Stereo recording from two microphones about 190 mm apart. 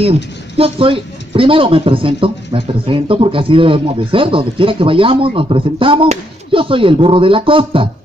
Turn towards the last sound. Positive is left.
turn(degrees=-30)  # may be behind; listen again after turning